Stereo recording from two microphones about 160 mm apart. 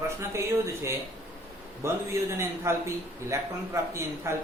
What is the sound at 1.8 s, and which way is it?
A man's voice, 15° right (ahead or behind).